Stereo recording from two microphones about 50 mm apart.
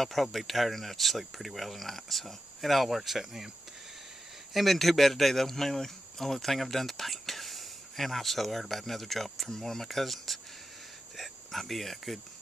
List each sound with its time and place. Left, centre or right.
0.0 s speech: centre
4.6 s speech: centre